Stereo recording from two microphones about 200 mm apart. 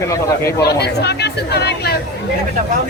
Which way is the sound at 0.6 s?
55° left (ahead or behind).